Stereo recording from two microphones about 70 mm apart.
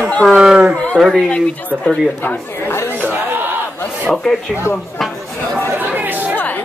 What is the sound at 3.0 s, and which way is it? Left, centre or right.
Battle cry, right.